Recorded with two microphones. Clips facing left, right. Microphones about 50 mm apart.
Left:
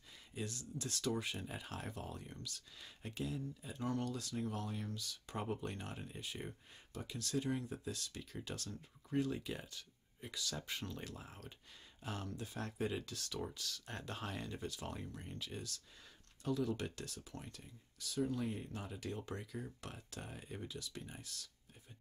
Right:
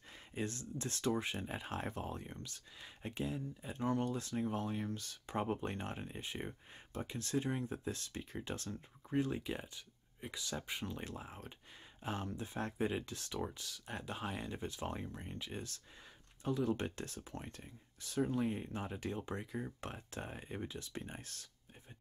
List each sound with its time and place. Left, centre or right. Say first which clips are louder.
0.3 s speech: right 4 dB; right
4.9 s speech: right 5 dB; right